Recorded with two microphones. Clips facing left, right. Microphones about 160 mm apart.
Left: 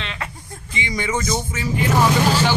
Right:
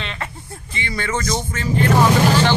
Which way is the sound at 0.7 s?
15° left (ahead or behind).